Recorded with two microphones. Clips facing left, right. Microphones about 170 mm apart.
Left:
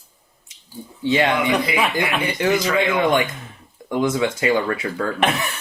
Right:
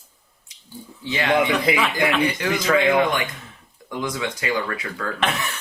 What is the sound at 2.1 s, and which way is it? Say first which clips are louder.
Speech: left 2 dB; 25° left (ahead or behind).